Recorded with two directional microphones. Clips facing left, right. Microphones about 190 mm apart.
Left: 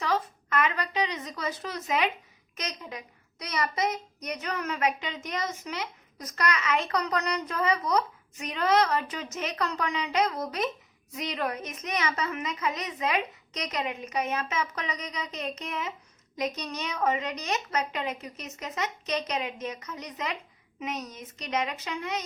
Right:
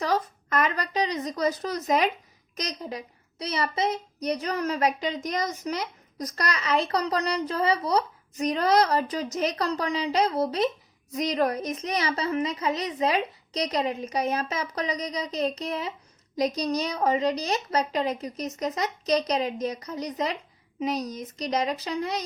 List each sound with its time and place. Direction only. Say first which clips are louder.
0.0 s a child's voice: right 3 dB; 40° right (ahead or behind)